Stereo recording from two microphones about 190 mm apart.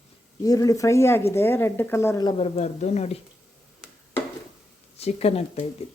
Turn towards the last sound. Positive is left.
turn(degrees=35)  # may be behind; listen again after turning